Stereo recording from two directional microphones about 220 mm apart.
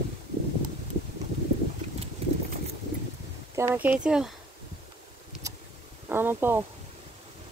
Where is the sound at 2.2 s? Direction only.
25° right (ahead or behind).